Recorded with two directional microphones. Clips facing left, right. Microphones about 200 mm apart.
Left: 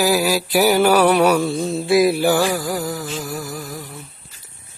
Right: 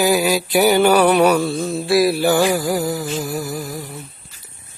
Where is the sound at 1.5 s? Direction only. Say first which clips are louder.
Even; 20° left (ahead or behind).